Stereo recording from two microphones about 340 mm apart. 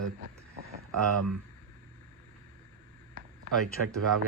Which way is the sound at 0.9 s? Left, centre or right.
Right.